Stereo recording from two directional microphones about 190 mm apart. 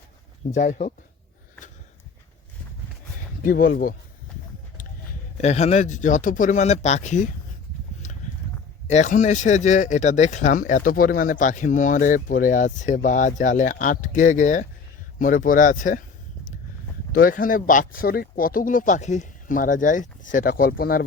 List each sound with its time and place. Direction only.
0.5 s speech: 40° left (ahead or behind)
3.4 s speech: 45° left (ahead or behind)
5.4 s speech: 35° left (ahead or behind)
8.0 s clip-clop: 40° left (ahead or behind)
8.9 s speech: 40° left (ahead or behind)
17.1 s speech: 50° left (ahead or behind)